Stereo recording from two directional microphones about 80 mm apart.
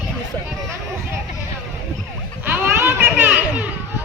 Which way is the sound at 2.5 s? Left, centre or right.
Right.